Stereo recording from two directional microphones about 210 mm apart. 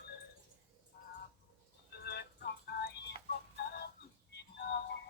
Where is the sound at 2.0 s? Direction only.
50° left (ahead or behind).